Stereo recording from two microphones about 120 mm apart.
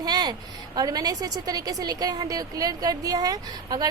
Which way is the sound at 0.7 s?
35° right (ahead or behind).